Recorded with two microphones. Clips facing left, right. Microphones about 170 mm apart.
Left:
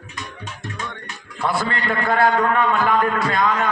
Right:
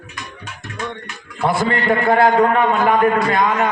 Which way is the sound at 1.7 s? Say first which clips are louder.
Right 6 dB; 55° right (ahead or behind).